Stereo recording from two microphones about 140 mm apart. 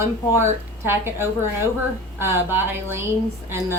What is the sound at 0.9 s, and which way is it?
Speech, 15° right (ahead or behind).